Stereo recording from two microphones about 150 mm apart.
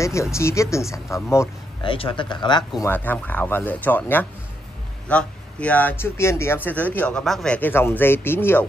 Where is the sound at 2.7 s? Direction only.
15° left (ahead or behind).